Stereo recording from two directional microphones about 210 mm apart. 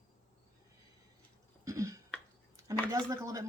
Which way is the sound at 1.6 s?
15° right (ahead or behind).